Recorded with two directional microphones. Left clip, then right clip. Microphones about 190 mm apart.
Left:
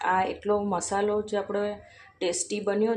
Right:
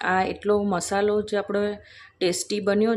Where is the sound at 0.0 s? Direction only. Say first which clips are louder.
Right 2 dB; 30° right (ahead or behind).